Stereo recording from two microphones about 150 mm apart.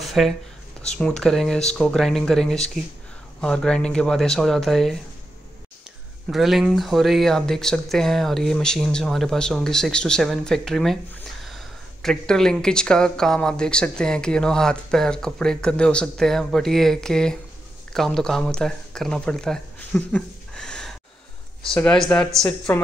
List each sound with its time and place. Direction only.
0.0 s a sound: centre (ahead or behind)
0.8 s speech: 5° left (ahead or behind)
6.3 s a woman's voice: centre (ahead or behind)